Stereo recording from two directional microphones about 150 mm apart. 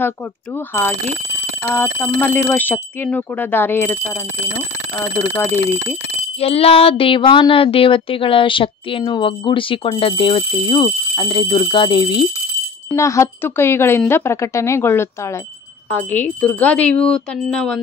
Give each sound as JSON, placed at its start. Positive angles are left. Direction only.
{"t": 0.6, "sound": "speech", "side_deg": 15}
{"t": 5.3, "sound": "speech", "side_deg": 15}
{"t": 6.4, "sound": "a woman's voice", "side_deg": 40}
{"t": 12.9, "sound": "speech", "side_deg": 20}